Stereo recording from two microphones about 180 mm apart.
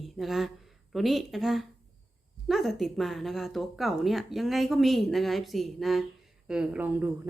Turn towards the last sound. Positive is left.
turn(degrees=-10)  # may be behind; listen again after turning